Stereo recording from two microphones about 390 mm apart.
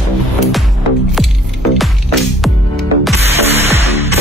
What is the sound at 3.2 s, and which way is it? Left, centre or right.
Music, centre.